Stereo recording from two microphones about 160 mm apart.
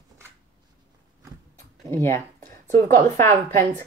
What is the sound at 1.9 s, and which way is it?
Speech, 15° left (ahead or behind).